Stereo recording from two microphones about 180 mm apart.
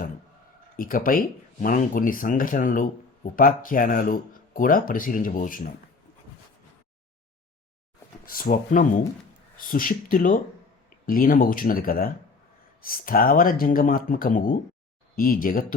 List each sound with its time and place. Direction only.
0.8 s speech: 50° left (ahead or behind)
8.3 s speech: 50° left (ahead or behind)